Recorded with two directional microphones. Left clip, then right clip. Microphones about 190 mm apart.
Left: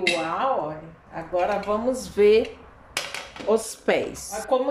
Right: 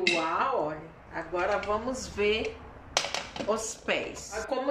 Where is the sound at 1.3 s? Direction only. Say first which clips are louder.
Left 5 dB; 15° left (ahead or behind).